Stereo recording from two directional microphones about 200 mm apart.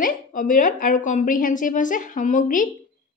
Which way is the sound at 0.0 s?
45° left (ahead or behind).